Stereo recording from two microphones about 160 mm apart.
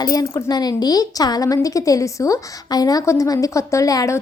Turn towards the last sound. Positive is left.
turn(degrees=20)  # may be behind; listen again after turning